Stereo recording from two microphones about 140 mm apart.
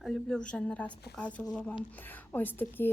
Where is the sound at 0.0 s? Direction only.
Centre (ahead or behind).